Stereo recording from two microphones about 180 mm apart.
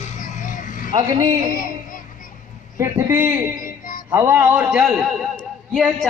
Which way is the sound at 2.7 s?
15° right (ahead or behind).